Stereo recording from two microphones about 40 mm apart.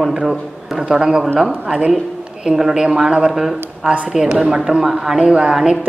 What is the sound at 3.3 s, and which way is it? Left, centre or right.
A woman's voice, centre.